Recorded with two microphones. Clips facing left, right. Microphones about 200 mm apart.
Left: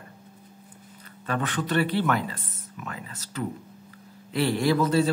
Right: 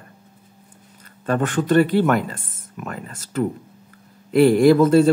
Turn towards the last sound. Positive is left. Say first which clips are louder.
# right 9 dB
turn(degrees=-50)  # may be behind; listen again after turning